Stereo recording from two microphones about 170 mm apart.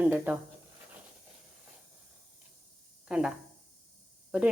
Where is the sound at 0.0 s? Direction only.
10° right (ahead or behind).